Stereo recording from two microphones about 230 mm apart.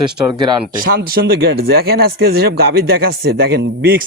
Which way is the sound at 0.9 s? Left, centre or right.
Right.